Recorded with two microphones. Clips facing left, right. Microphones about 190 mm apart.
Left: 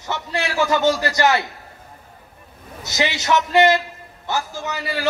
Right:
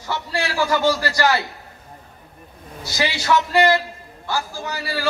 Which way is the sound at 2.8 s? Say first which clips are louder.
Left 1 dB; 20° left (ahead or behind).